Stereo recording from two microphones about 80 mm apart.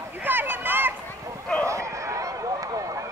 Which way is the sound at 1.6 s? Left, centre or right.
Right.